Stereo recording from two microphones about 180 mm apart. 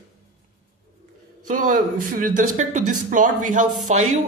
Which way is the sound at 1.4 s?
45° right (ahead or behind).